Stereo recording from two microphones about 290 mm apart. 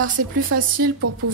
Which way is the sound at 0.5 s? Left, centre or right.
Right.